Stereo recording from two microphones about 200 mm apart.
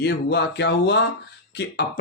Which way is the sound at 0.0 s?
55° left (ahead or behind).